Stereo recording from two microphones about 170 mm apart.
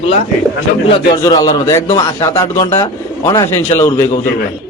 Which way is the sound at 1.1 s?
20° left (ahead or behind).